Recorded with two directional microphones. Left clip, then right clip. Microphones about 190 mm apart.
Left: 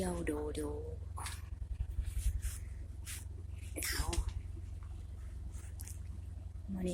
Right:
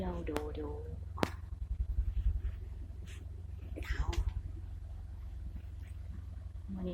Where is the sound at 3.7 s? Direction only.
5° left (ahead or behind).